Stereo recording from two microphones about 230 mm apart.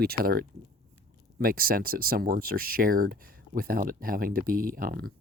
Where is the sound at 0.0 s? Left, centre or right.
Right.